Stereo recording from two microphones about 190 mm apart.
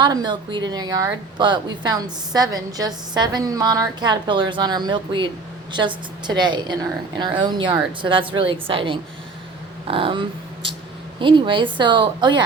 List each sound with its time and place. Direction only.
0.0 s a woman's voice: 20° right (ahead or behind)